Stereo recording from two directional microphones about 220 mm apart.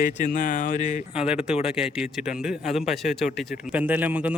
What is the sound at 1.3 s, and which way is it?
Speech, 5° right (ahead or behind).